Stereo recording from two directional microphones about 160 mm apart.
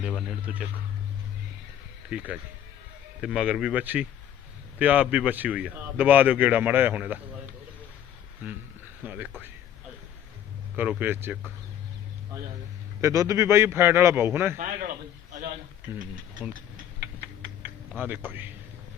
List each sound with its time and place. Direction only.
0.5 s speech: 5° right (ahead or behind)
2.0 s speech: 5° right (ahead or behind)
9.0 s speech: 10° right (ahead or behind)
10.8 s speech: 10° right (ahead or behind)
13.0 s speech: 20° right (ahead or behind)
14.6 s a man's voice: 55° right (ahead or behind)
15.9 s speech: 15° right (ahead or behind)
18.0 s speech: 10° right (ahead or behind)